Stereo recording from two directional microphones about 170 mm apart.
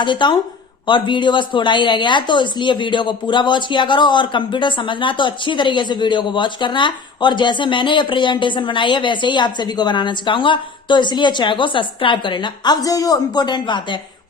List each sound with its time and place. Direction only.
0.0 s speech: 25° left (ahead or behind)